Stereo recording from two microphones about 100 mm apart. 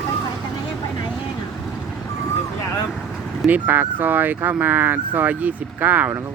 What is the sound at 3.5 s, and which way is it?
Speech, 20° right (ahead or behind).